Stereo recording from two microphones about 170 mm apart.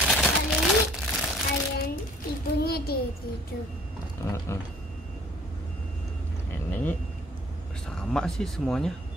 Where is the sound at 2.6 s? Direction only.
65° left (ahead or behind).